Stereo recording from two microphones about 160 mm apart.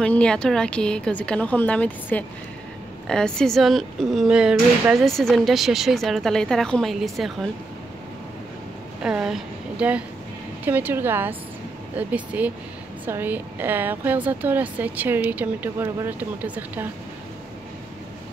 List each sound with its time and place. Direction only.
0.0 s speech: 5° left (ahead or behind)
9.0 s a woman's voice: 5° right (ahead or behind)